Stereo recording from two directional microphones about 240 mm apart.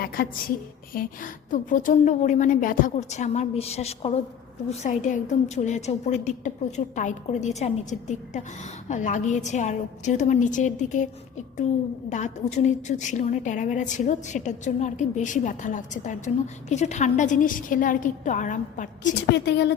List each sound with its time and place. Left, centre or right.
0.0 s a woman's voice: left
19.3 s a woman's voice: left